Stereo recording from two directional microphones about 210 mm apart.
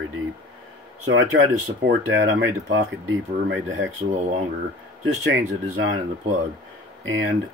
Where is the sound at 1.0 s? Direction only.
75° right (ahead or behind).